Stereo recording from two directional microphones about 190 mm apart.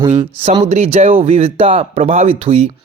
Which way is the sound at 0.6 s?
35° right (ahead or behind).